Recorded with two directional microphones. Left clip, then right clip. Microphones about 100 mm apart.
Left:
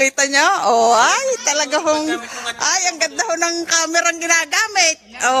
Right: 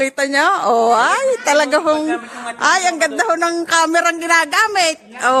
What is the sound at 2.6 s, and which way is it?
A woman's voice, 25° left (ahead or behind).